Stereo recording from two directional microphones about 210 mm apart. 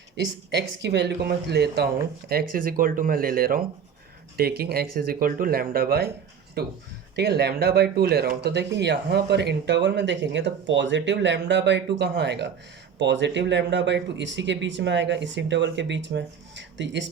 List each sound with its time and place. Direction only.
0.2 s speech: 55° right (ahead or behind)